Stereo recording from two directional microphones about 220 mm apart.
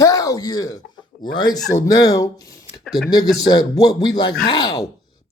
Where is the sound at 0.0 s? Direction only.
15° left (ahead or behind).